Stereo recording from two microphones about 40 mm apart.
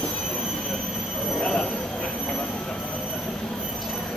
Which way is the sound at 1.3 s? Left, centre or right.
Left.